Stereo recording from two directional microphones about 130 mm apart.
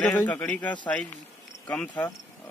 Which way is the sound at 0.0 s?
10° left (ahead or behind).